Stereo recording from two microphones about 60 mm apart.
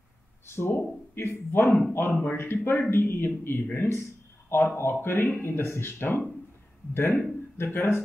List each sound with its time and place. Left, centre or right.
0.5 s a man's voice: left